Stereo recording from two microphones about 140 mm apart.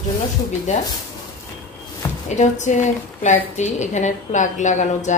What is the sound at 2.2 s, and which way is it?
A woman's voice, 60° left (ahead or behind).